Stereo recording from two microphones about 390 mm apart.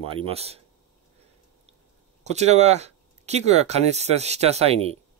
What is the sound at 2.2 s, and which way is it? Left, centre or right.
Speech, centre.